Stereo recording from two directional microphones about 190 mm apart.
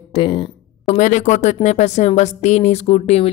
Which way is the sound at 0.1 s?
25° left (ahead or behind).